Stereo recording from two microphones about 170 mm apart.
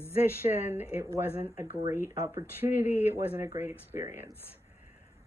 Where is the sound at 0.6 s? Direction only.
15° right (ahead or behind).